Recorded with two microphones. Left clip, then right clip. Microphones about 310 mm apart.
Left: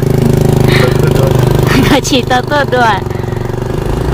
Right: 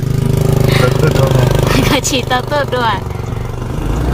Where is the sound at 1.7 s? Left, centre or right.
Centre.